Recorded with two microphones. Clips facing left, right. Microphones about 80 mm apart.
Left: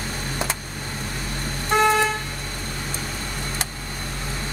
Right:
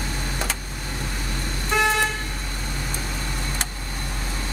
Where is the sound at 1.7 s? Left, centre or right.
Left.